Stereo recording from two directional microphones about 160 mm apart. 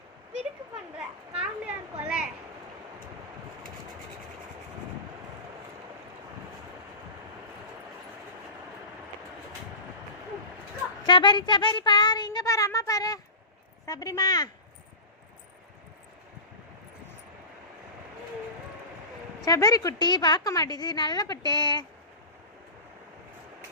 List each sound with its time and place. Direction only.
0.9 s children playing: 5° right (ahead or behind)
11.0 s a woman's voice: 30° left (ahead or behind)
19.5 s a woman's voice: 20° left (ahead or behind)